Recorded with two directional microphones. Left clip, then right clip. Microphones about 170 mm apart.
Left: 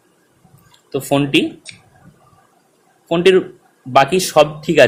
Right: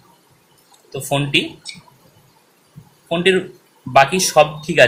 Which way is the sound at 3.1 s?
50° left (ahead or behind).